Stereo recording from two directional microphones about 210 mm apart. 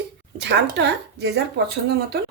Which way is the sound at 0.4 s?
55° right (ahead or behind).